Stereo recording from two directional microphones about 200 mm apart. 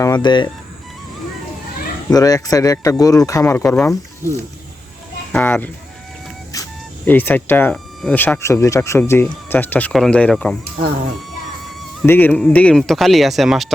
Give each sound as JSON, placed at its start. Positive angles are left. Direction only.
{"t": 0.0, "sound": "speech", "side_deg": 20}
{"t": 2.0, "sound": "speech", "side_deg": 20}
{"t": 5.3, "sound": "speech", "side_deg": 10}
{"t": 12.0, "sound": "speech", "side_deg": 10}